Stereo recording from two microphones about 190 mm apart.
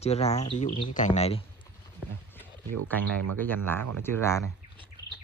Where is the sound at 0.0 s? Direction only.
35° left (ahead or behind).